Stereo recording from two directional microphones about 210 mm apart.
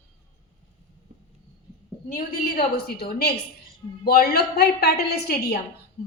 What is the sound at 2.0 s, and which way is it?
A woman's voice, 40° left (ahead or behind).